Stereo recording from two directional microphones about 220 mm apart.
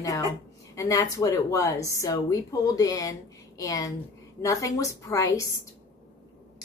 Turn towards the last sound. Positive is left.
turn(degrees=15)  # may be behind; listen again after turning